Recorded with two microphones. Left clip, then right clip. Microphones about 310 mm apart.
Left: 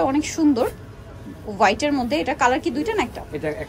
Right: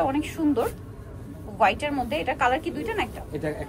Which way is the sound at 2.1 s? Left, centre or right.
Left.